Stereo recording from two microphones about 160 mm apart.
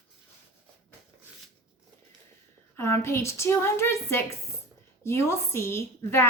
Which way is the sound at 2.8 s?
15° left (ahead or behind).